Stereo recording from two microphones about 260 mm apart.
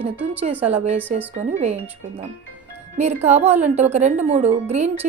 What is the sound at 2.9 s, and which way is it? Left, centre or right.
Speech, right.